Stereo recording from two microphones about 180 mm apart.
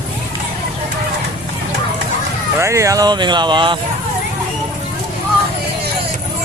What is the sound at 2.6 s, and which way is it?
Speech, 15° right (ahead or behind).